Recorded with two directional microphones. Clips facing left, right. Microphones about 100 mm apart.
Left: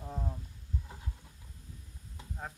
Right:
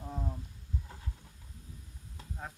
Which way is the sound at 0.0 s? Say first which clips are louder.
Even; centre (ahead or behind).